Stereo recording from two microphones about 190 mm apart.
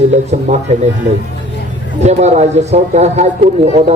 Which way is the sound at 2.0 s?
35° right (ahead or behind).